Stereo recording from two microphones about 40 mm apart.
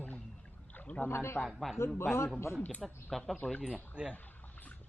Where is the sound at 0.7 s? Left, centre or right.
Left.